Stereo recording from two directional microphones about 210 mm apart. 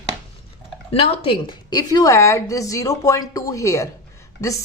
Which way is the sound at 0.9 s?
25° left (ahead or behind).